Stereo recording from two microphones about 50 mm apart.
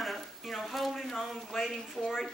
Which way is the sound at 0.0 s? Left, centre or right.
Centre.